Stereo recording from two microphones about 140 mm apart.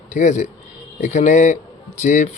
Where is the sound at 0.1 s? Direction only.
60° left (ahead or behind).